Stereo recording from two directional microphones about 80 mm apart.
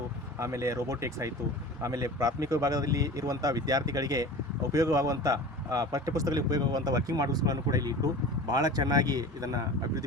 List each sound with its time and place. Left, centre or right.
0.3 s speech: right